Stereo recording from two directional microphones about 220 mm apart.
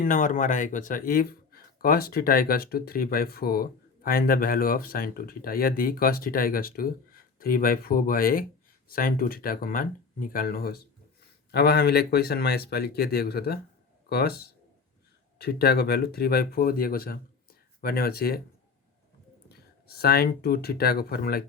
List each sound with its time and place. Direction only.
0.0 s speech: 35° left (ahead or behind)
19.5 s speech: 45° left (ahead or behind)